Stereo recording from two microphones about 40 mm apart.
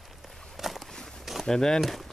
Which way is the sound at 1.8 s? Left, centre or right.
Centre.